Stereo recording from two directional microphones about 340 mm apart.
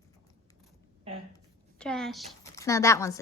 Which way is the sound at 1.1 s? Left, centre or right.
Centre.